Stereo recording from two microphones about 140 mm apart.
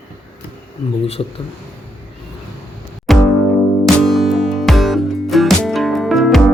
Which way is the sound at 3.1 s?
Centre (ahead or behind).